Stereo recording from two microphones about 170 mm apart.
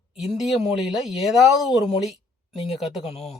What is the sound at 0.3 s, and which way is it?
Speech, centre (ahead or behind).